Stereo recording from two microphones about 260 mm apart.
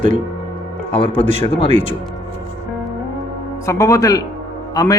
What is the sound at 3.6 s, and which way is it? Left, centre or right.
Speech, centre.